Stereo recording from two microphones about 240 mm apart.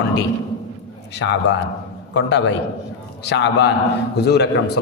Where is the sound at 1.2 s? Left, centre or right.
Left.